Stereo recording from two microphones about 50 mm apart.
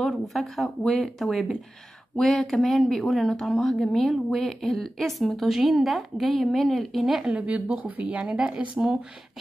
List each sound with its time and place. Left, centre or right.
0.0 s a woman's voice: centre
7.2 s speech: right